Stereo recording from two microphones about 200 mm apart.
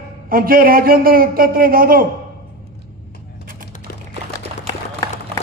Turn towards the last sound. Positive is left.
turn(degrees=15)  # may be behind; listen again after turning